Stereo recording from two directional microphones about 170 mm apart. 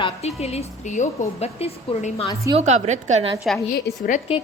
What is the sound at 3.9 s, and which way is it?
Speech, 75° left (ahead or behind).